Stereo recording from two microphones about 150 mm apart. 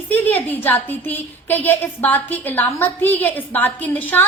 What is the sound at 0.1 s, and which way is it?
A woman's voice, 10° left (ahead or behind).